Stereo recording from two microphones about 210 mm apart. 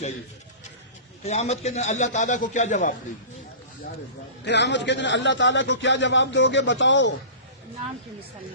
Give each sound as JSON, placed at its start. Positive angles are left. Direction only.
{"t": 1.2, "sound": "a man's voice", "side_deg": 30}
{"t": 4.4, "sound": "a man's voice", "side_deg": 55}